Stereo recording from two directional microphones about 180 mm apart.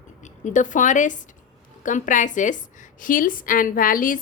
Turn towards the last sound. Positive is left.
turn(degrees=50)  # may be behind; listen again after turning